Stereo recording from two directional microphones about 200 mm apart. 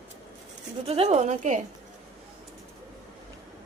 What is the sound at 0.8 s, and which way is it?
Speech, 30° right (ahead or behind).